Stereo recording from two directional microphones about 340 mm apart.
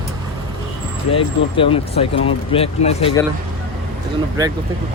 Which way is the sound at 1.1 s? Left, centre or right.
Centre.